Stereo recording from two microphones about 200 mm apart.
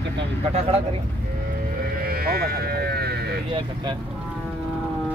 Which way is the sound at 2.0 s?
50° right (ahead or behind).